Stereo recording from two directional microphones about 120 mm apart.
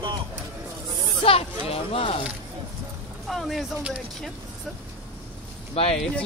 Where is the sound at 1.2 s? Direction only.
55° left (ahead or behind).